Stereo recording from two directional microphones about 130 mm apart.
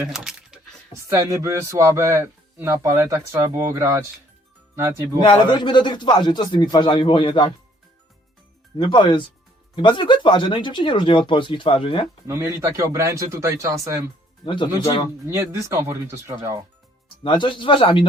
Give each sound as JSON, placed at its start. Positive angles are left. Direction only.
{"t": 0.1, "sound": "keys jangling", "side_deg": -5}
{"t": 1.1, "sound": "speech", "side_deg": -25}
{"t": 5.2, "sound": "speech", "side_deg": 35}
{"t": 8.8, "sound": "speech", "side_deg": 40}
{"t": 12.3, "sound": "speech", "side_deg": -20}
{"t": 14.4, "sound": "speech", "side_deg": 40}
{"t": 15.3, "sound": "speech", "side_deg": -20}
{"t": 17.2, "sound": "speech", "side_deg": 35}